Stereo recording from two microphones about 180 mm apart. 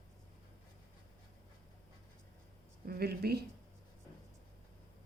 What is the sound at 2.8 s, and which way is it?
Speech, 60° right (ahead or behind).